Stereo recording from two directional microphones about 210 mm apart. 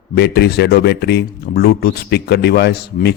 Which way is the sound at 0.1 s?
50° left (ahead or behind).